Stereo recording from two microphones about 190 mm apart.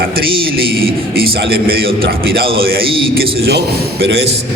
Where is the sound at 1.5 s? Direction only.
55° right (ahead or behind).